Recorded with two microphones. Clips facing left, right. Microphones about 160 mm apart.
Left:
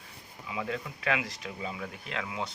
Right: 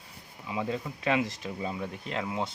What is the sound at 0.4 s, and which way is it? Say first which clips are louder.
Speech: right 3 dB; 30° right (ahead or behind).